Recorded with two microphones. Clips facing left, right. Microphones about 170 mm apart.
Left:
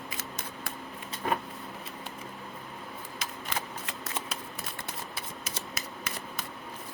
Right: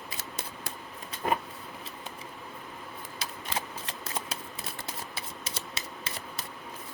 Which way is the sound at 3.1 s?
30° right (ahead or behind).